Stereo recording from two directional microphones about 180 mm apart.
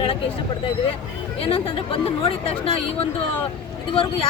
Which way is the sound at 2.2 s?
30° left (ahead or behind).